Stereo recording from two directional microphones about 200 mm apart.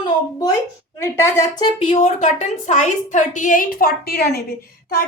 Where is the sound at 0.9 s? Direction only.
15° left (ahead or behind).